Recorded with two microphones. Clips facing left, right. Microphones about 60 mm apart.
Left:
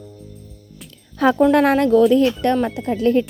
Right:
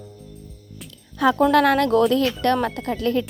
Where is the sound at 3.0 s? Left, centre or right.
Left.